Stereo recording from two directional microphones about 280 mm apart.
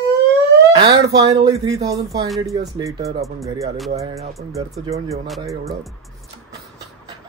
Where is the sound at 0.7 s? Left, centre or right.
Centre.